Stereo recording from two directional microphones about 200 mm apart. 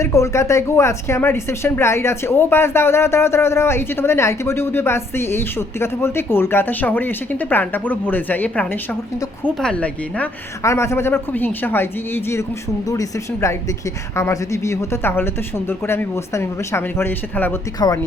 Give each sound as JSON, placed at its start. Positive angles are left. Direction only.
{"t": 0.0, "sound": "speech", "side_deg": 15}